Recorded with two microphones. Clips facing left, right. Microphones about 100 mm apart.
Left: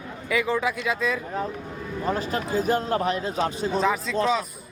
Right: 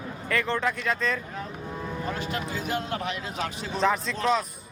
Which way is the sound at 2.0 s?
35° left (ahead or behind).